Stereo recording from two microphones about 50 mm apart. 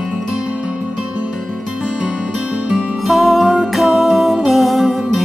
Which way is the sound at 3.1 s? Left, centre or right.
Centre.